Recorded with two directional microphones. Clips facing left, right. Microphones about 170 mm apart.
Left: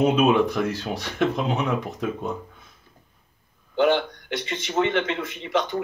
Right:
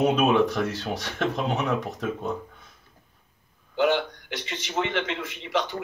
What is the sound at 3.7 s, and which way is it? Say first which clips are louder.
Speech: left 3 dB; 10° right (ahead or behind).